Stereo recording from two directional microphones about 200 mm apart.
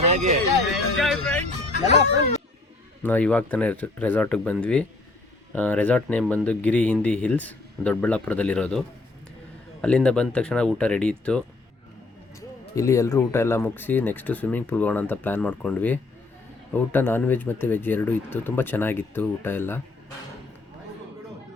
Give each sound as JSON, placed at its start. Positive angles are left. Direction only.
{"t": 0.0, "sound": "music", "side_deg": -35}
{"t": 0.9, "sound": "speech", "side_deg": 0}
{"t": 3.0, "sound": "speech", "side_deg": 10}
{"t": 9.8, "sound": "speech", "side_deg": 5}
{"t": 12.7, "sound": "speech", "side_deg": 15}